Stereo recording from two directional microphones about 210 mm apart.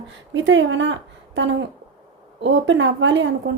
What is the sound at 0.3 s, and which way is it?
A woman's voice, 60° right (ahead or behind).